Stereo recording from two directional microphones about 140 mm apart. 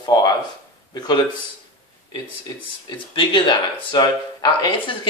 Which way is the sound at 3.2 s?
35° left (ahead or behind).